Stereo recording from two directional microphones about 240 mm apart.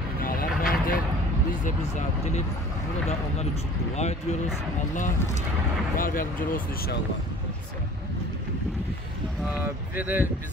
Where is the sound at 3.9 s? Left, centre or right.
Left.